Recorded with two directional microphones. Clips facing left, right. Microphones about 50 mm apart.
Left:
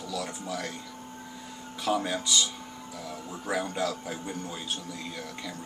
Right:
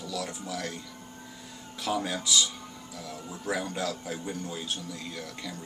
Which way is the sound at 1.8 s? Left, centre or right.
Centre.